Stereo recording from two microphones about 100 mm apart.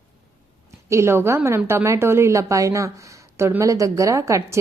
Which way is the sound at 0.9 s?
25° right (ahead or behind).